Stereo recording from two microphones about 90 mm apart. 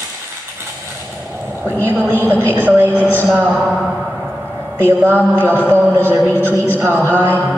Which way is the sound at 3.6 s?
5° left (ahead or behind).